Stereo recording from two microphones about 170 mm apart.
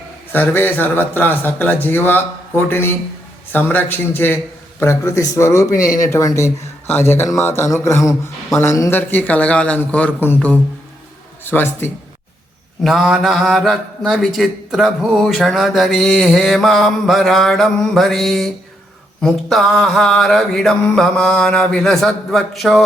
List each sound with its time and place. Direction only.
0.3 s speech: 10° left (ahead or behind)
12.8 s a man's voice: centre (ahead or behind)